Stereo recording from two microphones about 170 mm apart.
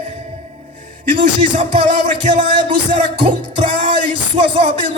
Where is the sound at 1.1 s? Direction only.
30° right (ahead or behind).